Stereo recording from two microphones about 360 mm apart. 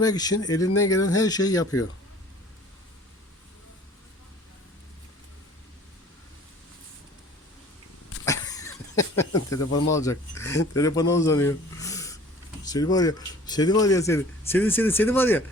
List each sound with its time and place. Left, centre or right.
0.0 s speech: centre
8.2 s cough: centre
9.6 s speech: left
9.9 s speech: centre